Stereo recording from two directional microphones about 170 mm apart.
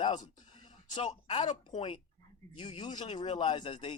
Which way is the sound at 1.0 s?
40° left (ahead or behind).